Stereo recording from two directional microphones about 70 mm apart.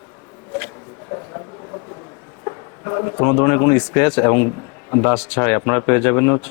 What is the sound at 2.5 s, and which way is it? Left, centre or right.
Speech, left.